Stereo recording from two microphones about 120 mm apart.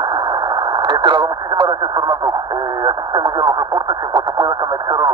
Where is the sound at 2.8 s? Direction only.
35° right (ahead or behind).